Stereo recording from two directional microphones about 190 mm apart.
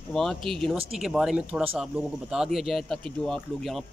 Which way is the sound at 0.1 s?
Centre (ahead or behind).